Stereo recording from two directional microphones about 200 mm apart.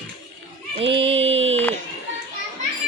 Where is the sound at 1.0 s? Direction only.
30° right (ahead or behind).